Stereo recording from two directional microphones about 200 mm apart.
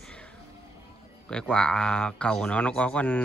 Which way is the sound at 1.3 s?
5° left (ahead or behind).